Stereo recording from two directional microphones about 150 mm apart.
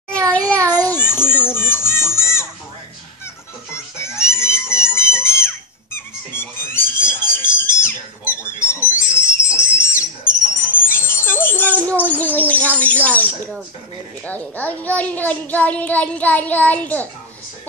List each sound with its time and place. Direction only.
0.5 s a sound: 10° left (ahead or behind)
1.5 s children playing: 15° left (ahead or behind)
3.7 s music: 20° left (ahead or behind)
5.9 s a sound: 15° left (ahead or behind)
9.9 s music: 15° left (ahead or behind)
14.2 s a child's voice: 10° left (ahead or behind)